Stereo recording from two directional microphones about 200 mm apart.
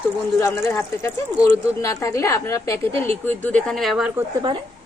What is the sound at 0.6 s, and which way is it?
A woman's voice, 10° left (ahead or behind).